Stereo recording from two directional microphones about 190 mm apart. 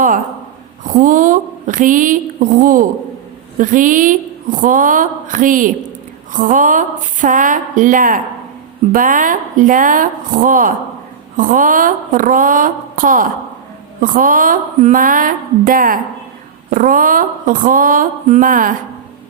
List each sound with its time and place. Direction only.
0.9 s a woman's voice: 45° right (ahead or behind)